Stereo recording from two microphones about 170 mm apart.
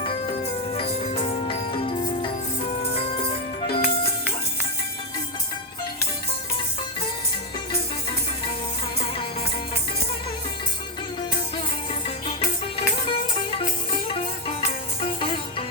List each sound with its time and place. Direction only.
0.7 s music: 35° left (ahead or behind)
3.8 s music: 35° left (ahead or behind)
12.7 s music: 30° left (ahead or behind)
15.0 s music: 30° left (ahead or behind)